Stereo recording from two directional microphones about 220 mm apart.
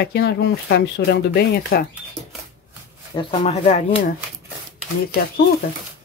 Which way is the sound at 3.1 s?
25° left (ahead or behind).